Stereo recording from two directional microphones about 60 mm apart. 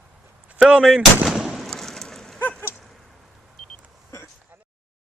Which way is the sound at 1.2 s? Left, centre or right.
Centre.